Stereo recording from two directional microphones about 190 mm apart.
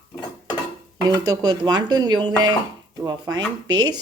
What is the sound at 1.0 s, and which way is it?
Speech, 20° right (ahead or behind).